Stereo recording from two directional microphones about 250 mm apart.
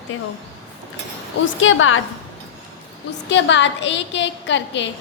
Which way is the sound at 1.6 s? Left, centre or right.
Left.